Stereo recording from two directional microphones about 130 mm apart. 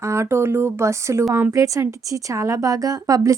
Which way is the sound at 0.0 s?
20° right (ahead or behind).